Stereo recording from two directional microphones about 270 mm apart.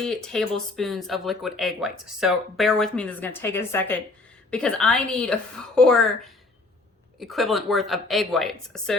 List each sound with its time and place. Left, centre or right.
0.0 s speech: centre
7.2 s speech: centre